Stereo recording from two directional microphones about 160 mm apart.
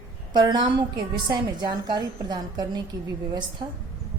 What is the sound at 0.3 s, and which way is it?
A woman's voice, 30° right (ahead or behind).